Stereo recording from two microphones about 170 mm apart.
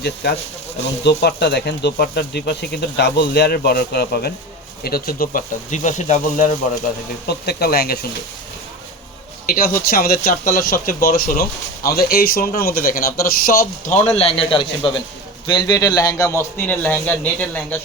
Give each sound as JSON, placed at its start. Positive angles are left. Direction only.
{"t": 0.0, "sound": "speech", "side_deg": 70}
{"t": 7.3, "sound": "speech", "side_deg": 70}
{"t": 9.5, "sound": "a man's voice", "side_deg": 60}